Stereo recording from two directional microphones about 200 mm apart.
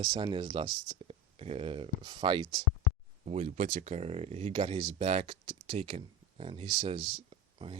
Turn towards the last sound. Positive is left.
turn(degrees=-25)  # may be behind; listen again after turning